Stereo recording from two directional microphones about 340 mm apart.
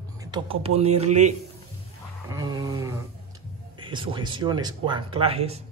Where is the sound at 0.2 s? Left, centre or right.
Centre.